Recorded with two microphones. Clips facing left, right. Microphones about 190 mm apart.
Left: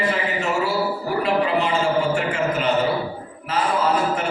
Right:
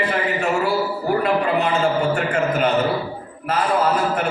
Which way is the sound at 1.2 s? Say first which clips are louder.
Left 2 dB; 55° right (ahead or behind).